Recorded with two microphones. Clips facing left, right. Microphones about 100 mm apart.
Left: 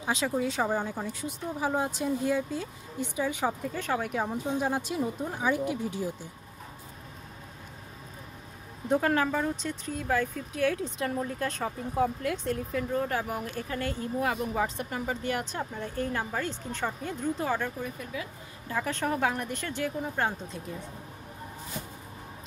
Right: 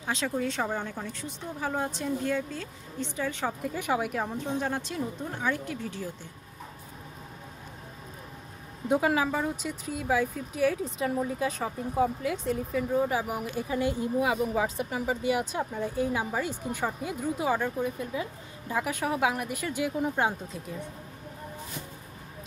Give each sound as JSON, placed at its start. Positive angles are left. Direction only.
{"t": 0.0, "sound": "speech", "side_deg": 5}
{"t": 3.6, "sound": "speech", "side_deg": -10}
{"t": 4.1, "sound": "speech", "side_deg": 5}
{"t": 8.8, "sound": "speech", "side_deg": -10}
{"t": 20.4, "sound": "speech", "side_deg": 0}